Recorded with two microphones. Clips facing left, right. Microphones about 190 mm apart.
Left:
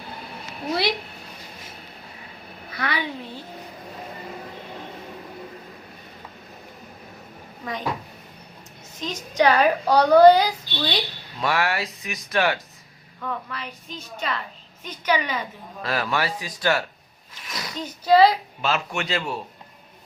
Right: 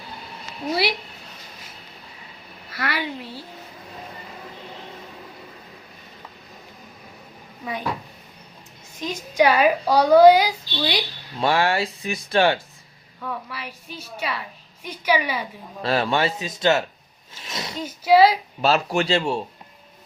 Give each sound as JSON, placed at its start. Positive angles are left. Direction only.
{"t": 0.7, "sound": "a woman's voice", "side_deg": -5}
{"t": 2.7, "sound": "a woman's voice", "side_deg": -5}
{"t": 7.6, "sound": "speech", "side_deg": -10}
{"t": 9.0, "sound": "a woman's voice", "side_deg": -10}
{"t": 11.3, "sound": "speech", "side_deg": -30}
{"t": 13.2, "sound": "a woman's voice", "side_deg": -10}
{"t": 15.8, "sound": "speech", "side_deg": -30}
{"t": 17.3, "sound": "sneeze", "side_deg": -25}
{"t": 17.7, "sound": "a woman's voice", "side_deg": -5}
{"t": 18.6, "sound": "speech", "side_deg": -35}